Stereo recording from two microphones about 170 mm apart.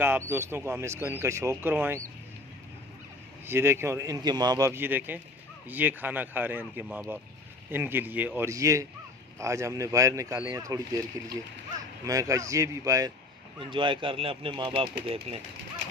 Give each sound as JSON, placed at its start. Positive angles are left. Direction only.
{"t": 0.0, "sound": "speech", "side_deg": -15}
{"t": 3.4, "sound": "speech", "side_deg": -15}